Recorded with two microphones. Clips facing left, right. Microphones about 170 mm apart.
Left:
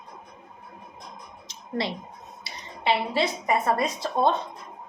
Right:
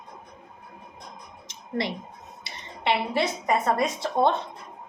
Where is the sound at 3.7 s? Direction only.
25° right (ahead or behind).